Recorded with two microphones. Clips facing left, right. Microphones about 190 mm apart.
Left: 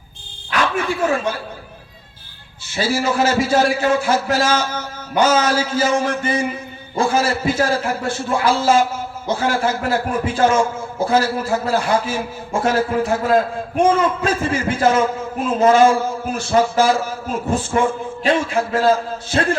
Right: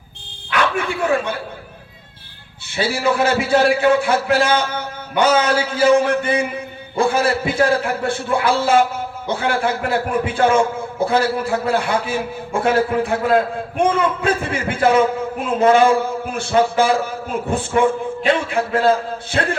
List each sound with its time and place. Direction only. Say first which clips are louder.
0.6 s a man's voice: left 1 dB; 60° right (ahead or behind)
2.7 s a man's voice: even; 60° right (ahead or behind)